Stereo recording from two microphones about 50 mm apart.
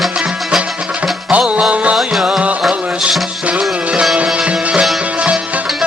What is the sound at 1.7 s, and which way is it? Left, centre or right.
Music, right.